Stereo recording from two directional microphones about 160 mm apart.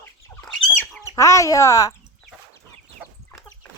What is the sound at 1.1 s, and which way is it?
Speech, 20° left (ahead or behind).